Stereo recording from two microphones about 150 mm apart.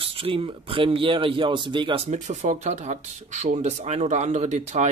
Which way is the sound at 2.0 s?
50° right (ahead or behind).